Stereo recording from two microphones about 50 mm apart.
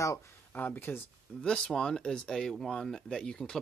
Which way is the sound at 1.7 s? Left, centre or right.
Centre.